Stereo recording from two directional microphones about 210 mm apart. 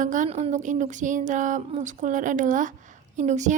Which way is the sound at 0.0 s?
40° right (ahead or behind).